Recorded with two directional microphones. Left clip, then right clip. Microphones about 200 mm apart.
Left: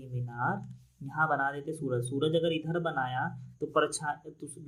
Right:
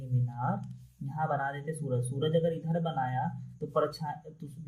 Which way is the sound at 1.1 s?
30° left (ahead or behind).